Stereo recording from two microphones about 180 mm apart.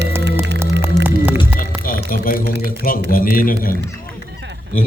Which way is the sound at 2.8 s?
50° left (ahead or behind).